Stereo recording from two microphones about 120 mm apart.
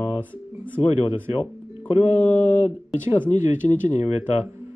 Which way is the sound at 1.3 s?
55° left (ahead or behind).